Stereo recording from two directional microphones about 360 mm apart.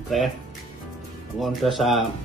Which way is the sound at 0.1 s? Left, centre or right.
Centre.